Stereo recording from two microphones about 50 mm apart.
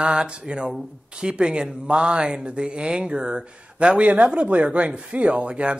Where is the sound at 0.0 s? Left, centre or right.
Centre.